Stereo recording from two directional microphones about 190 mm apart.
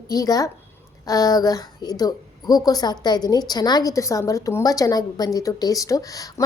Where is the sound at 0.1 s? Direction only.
20° left (ahead or behind).